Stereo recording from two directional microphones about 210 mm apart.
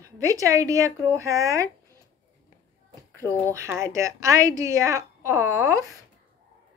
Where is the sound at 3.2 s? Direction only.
10° left (ahead or behind).